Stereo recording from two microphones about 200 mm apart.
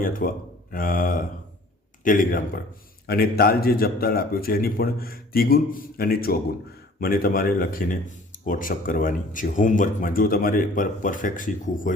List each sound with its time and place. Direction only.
0.0 s speech: 45° left (ahead or behind)